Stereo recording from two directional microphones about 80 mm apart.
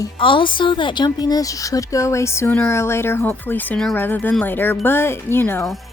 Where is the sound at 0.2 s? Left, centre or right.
Left.